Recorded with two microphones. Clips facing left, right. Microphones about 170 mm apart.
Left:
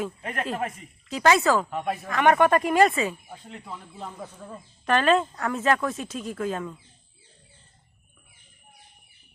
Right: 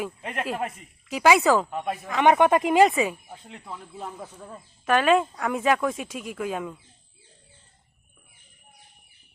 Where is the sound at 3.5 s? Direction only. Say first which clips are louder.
Even; centre (ahead or behind).